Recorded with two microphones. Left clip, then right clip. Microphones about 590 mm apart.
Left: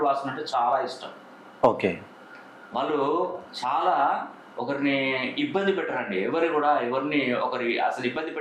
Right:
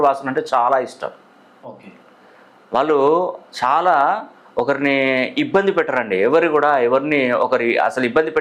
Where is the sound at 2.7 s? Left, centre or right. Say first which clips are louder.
Right 10 dB; right.